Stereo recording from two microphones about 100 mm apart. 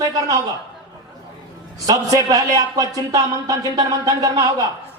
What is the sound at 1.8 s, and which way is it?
A man's voice, 35° right (ahead or behind).